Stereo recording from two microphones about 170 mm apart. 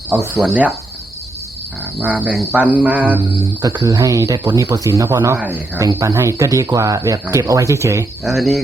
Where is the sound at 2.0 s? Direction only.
10° right (ahead or behind).